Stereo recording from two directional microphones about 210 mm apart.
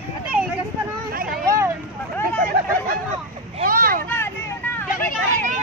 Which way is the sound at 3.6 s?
45° right (ahead or behind).